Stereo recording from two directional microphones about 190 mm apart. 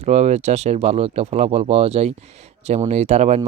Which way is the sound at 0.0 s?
35° right (ahead or behind).